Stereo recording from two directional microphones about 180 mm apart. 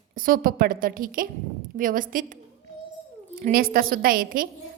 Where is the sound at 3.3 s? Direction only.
55° right (ahead or behind).